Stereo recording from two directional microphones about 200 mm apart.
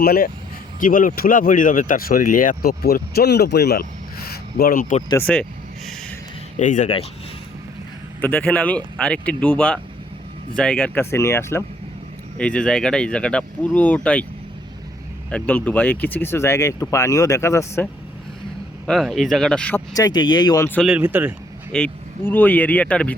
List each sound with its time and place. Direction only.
0.0 s speech: 50° left (ahead or behind)
5.0 s speech: 10° left (ahead or behind)
6.6 s speech: 40° left (ahead or behind)
8.2 s speech: 5° left (ahead or behind)
15.3 s speech: 5° left (ahead or behind)
18.9 s speech: centre (ahead or behind)
20.0 s speech: 20° left (ahead or behind)
20.8 s speech: 5° right (ahead or behind)
21.7 s speech: 5° left (ahead or behind)